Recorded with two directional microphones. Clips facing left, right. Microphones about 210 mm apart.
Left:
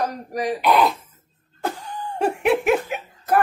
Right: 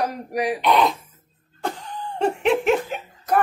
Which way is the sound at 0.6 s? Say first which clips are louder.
Left 1 dB; centre (ahead or behind).